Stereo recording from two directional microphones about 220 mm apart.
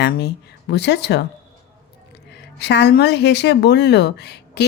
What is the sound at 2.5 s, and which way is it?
A woman's voice, 50° left (ahead or behind).